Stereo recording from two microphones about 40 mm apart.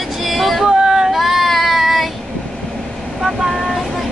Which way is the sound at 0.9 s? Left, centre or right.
Centre.